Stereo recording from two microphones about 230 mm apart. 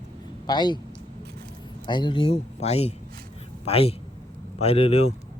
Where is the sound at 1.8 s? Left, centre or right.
Centre.